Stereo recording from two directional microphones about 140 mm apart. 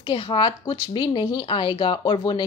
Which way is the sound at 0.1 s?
35° left (ahead or behind).